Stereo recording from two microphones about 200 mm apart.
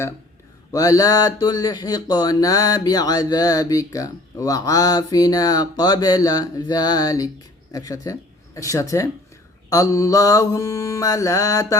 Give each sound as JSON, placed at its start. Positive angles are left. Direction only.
{"t": 0.7, "sound": "speech", "side_deg": 15}
{"t": 9.6, "sound": "mantra", "side_deg": 15}